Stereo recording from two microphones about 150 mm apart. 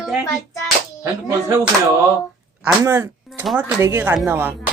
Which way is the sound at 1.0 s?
20° right (ahead or behind).